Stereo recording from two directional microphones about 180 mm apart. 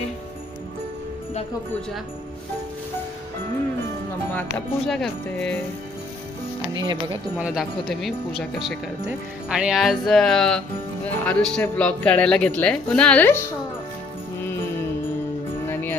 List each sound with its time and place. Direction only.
4.5 s speech: 5° left (ahead or behind)
6.8 s speech: 25° right (ahead or behind)
7.3 s a woman's voice: 5° right (ahead or behind)
15.6 s music: 10° left (ahead or behind)